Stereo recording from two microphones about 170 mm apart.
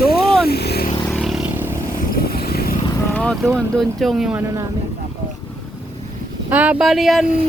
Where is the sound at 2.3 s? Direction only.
65° left (ahead or behind).